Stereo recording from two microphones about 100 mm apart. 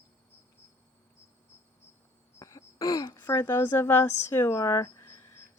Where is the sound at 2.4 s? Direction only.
35° left (ahead or behind).